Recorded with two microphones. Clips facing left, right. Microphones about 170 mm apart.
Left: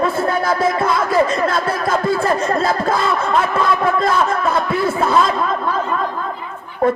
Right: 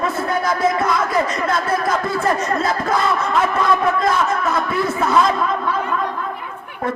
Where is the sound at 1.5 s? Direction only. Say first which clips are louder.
Left 1 dB; 30° left (ahead or behind).